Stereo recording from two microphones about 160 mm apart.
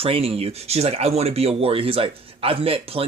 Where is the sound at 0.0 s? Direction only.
35° right (ahead or behind).